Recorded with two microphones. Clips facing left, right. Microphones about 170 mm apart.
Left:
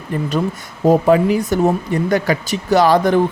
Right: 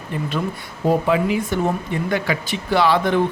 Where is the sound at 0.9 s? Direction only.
40° left (ahead or behind).